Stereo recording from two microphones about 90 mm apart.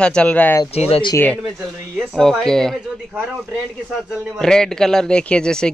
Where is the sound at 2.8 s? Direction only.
10° right (ahead or behind).